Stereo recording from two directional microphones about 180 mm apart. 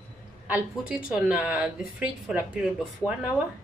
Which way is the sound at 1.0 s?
5° right (ahead or behind).